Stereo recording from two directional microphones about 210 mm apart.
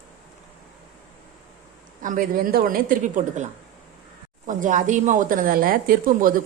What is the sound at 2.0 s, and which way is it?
A man's voice, 40° right (ahead or behind).